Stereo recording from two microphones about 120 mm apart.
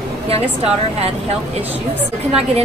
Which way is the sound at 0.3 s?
55° right (ahead or behind).